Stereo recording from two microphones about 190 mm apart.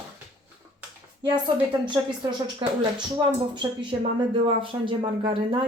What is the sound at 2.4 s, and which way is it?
Speech, 25° right (ahead or behind).